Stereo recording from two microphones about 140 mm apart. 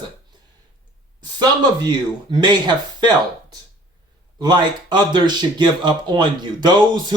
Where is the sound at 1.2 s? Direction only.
30° right (ahead or behind).